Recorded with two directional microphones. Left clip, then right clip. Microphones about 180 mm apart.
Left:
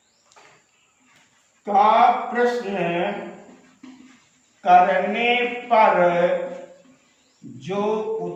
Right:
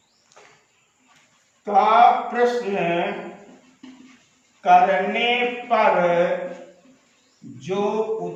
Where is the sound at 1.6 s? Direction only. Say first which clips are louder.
Right 1 dB; 20° right (ahead or behind).